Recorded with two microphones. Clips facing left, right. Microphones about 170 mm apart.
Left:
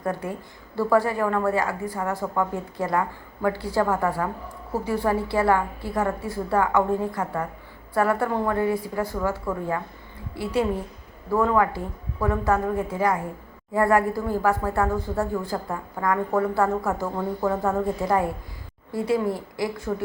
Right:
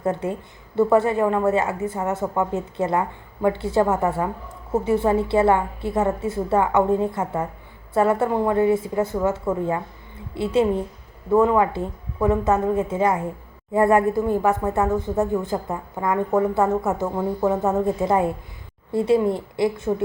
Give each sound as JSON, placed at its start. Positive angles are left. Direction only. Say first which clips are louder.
{"t": 0.0, "sound": "speech", "louder": "right 4 dB", "side_deg": -25}